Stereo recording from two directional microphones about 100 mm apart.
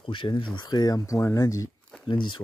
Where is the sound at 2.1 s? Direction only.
55° left (ahead or behind).